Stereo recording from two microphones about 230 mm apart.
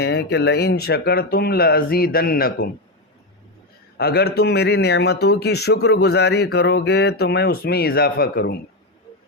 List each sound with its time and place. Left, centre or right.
0.0 s speech: left
3.9 s speech: left